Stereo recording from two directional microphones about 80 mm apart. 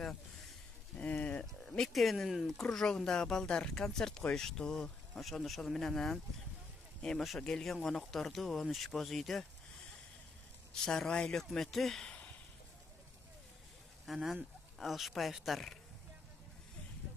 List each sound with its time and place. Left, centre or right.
0.9 s a sound: centre
1.8 s speech: centre
10.7 s speech: centre
14.0 s speech: centre